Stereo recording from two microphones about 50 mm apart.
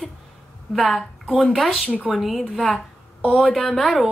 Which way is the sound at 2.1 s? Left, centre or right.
Centre.